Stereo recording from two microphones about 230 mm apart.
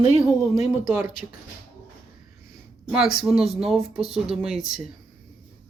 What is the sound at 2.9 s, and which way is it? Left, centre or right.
Speech, centre.